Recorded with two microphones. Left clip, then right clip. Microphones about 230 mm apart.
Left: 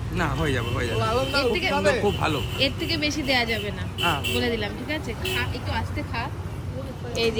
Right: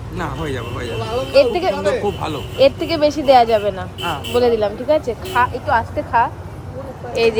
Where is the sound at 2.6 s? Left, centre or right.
Right.